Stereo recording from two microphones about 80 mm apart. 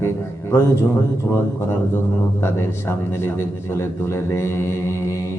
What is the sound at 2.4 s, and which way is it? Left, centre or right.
Mantra, left.